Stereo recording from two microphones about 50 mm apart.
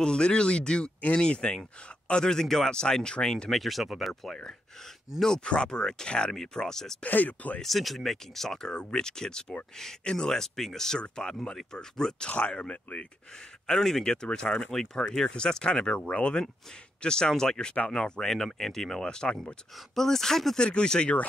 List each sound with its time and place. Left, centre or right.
0.0 s speech: centre
5.4 s speech: centre
7.0 s speech: left
7.6 s speech: centre; by 13.0 s left
13.7 s speech: centre